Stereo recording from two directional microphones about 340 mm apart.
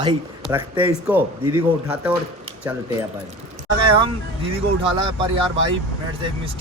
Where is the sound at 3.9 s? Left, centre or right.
Centre.